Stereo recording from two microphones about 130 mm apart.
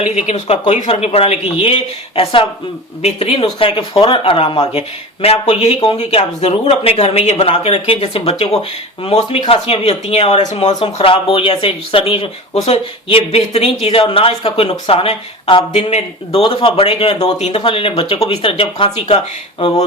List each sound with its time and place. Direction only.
0.0 s speech: 60° left (ahead or behind)
10.5 s speech: 60° left (ahead or behind)
10.9 s speech: 45° left (ahead or behind)